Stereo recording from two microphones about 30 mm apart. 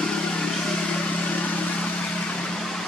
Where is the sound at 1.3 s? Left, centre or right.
Left.